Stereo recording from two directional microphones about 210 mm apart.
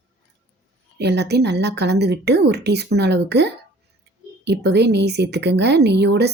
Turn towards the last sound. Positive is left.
turn(degrees=-55)  # may be behind; listen again after turning